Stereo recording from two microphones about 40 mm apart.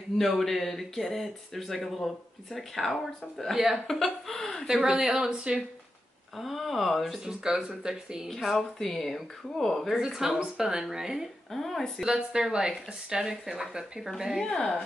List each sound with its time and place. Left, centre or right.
0.4 s speech: centre
3.5 s speech: centre
3.8 s speech: centre
4.6 s speech: centre
6.3 s speech: centre
7.2 s speech: centre
8.3 s speech: centre
9.9 s speech: centre
11.5 s speech: centre
12.0 s speech: centre